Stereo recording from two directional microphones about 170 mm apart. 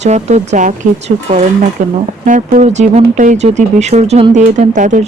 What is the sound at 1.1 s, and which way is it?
Speech, 30° right (ahead or behind).